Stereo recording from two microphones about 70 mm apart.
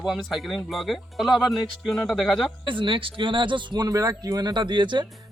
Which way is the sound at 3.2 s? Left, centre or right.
Right.